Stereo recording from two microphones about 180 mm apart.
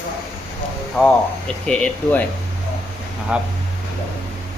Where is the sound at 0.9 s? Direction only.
5° left (ahead or behind).